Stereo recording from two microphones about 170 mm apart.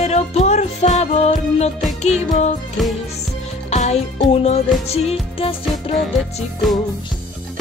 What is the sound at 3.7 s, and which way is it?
Music, 40° left (ahead or behind).